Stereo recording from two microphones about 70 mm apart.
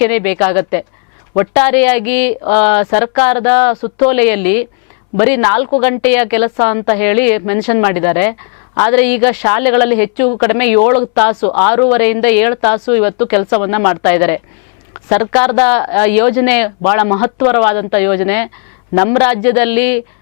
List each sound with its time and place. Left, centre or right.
0.0 s a woman's voice: centre